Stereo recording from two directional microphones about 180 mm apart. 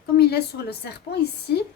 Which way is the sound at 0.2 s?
65° left (ahead or behind).